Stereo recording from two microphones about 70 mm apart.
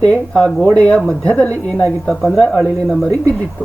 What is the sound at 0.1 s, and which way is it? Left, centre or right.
A woman's voice, centre.